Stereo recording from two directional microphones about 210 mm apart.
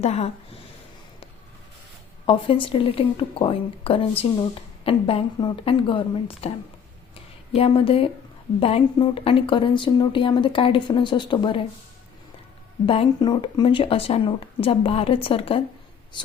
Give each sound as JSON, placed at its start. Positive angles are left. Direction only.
{"t": 0.0, "sound": "a woman's voice", "side_deg": 30}
{"t": 2.2, "sound": "speech", "side_deg": 25}
{"t": 7.5, "sound": "speech", "side_deg": 25}
{"t": 12.8, "sound": "speech", "side_deg": 25}